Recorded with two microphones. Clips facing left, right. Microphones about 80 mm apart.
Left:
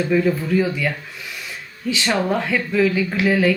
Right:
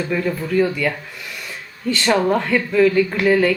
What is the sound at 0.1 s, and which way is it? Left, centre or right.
Speech, centre.